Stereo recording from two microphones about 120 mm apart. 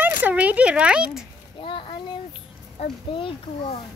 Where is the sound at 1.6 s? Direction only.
45° left (ahead or behind).